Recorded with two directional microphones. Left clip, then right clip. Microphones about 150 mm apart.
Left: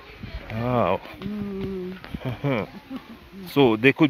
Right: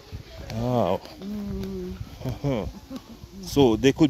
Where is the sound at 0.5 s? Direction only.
40° right (ahead or behind).